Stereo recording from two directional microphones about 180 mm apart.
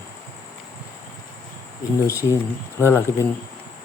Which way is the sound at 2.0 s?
20° left (ahead or behind).